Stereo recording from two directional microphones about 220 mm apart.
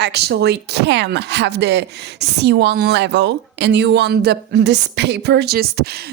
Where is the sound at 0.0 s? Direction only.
50° right (ahead or behind).